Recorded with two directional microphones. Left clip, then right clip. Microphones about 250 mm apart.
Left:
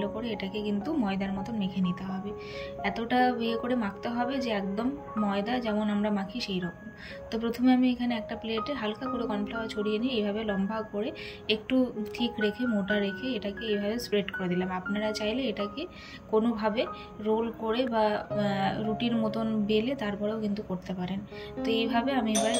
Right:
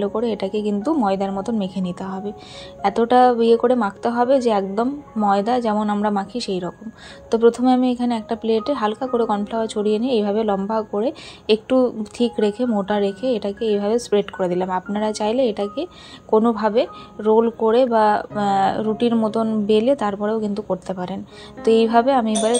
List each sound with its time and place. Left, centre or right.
0.0 s speech: centre